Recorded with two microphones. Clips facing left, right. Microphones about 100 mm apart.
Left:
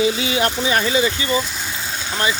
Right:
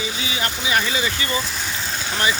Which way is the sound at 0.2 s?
60° left (ahead or behind).